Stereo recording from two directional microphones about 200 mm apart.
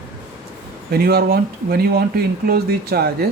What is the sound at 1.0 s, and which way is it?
Speech, 50° right (ahead or behind).